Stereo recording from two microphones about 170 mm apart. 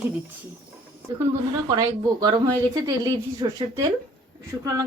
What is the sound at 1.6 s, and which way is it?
Speech, 20° right (ahead or behind).